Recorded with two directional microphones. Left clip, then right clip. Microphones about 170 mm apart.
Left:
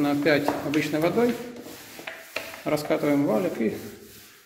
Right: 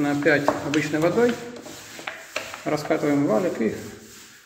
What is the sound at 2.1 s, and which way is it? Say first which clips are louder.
Rub: right 4 dB; 5° right (ahead or behind).